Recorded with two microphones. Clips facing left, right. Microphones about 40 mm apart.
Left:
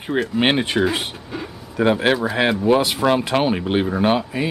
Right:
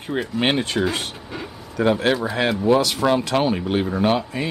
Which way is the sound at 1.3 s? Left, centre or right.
Centre.